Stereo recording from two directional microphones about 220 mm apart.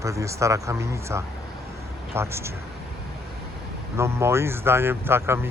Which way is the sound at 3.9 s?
10° right (ahead or behind).